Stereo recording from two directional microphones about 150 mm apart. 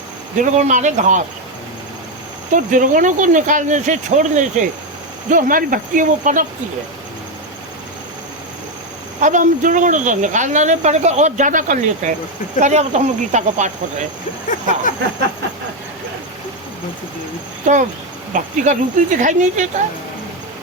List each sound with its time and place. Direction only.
0.3 s speech: 55° right (ahead or behind)
2.5 s speech: 60° right (ahead or behind)
9.2 s speech: 60° right (ahead or behind)
14.5 s a sound: 60° left (ahead or behind)
18.3 s speech: 55° right (ahead or behind)